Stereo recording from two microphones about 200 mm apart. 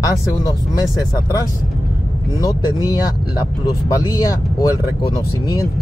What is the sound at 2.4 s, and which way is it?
Speech, 20° left (ahead or behind).